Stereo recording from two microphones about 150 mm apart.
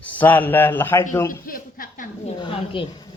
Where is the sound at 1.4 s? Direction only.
70° left (ahead or behind).